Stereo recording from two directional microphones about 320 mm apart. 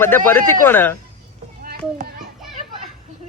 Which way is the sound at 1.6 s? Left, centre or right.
Right.